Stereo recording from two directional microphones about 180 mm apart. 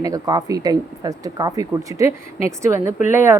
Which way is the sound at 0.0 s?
20° right (ahead or behind).